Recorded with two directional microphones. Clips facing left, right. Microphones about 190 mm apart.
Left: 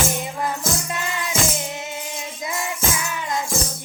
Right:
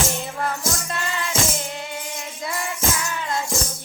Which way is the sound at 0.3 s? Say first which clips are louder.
Left 1 dB; 15° left (ahead or behind).